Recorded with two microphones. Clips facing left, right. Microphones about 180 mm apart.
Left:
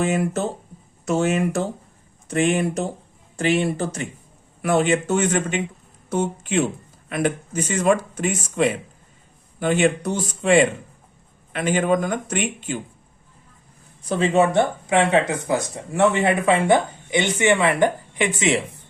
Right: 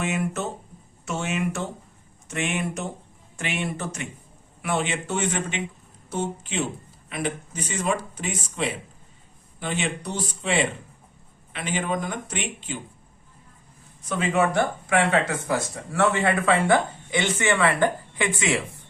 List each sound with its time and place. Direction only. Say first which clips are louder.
0.0 s speech: left 5 dB; 35° left (ahead or behind)
14.0 s speech: left 5 dB; 30° left (ahead or behind)